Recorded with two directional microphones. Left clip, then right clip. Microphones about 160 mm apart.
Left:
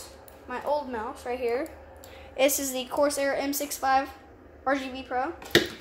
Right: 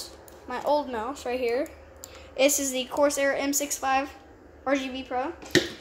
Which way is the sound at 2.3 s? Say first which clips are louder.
Right 1 dB; 15° right (ahead or behind).